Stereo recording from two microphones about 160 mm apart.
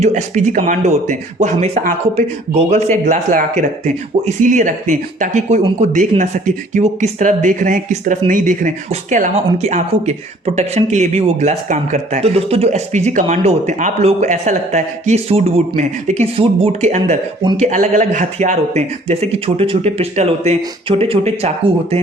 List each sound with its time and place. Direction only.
0.0 s speech: 50° right (ahead or behind)